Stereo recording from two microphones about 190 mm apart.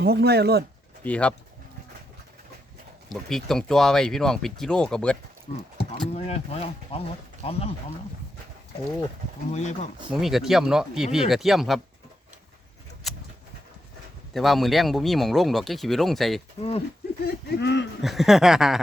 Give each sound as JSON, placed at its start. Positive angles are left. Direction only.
{"t": 0.0, "sound": "speech", "side_deg": -55}
{"t": 1.0, "sound": "speech", "side_deg": 5}
{"t": 3.1, "sound": "speech", "side_deg": 0}
{"t": 6.1, "sound": "speech", "side_deg": 35}
{"t": 9.5, "sound": "speech", "side_deg": 40}
{"t": 10.1, "sound": "speech", "side_deg": 0}
{"t": 13.0, "sound": "a sound", "side_deg": 0}
{"t": 14.3, "sound": "speech", "side_deg": 0}
{"t": 16.6, "sound": "speech", "side_deg": 30}
{"t": 17.2, "sound": "speech", "side_deg": 65}
{"t": 18.0, "sound": "speech", "side_deg": 0}